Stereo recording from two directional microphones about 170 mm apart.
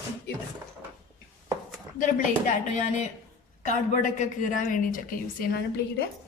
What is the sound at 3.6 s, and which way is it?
A woman's voice, 45° left (ahead or behind).